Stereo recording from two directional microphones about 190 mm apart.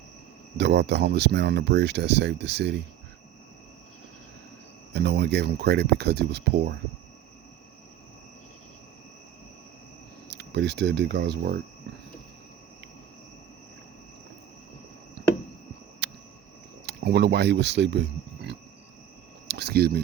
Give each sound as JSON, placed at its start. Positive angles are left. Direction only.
{"t": 0.5, "sound": "speech", "side_deg": -65}
{"t": 4.9, "sound": "speech", "side_deg": -60}
{"t": 10.2, "sound": "speech", "side_deg": -60}
{"t": 16.0, "sound": "a sound", "side_deg": -65}
{"t": 16.8, "sound": "speech", "side_deg": -60}
{"t": 19.5, "sound": "a sound", "side_deg": -60}